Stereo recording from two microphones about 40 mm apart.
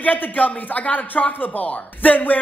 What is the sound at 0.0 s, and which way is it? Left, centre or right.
Speech, left.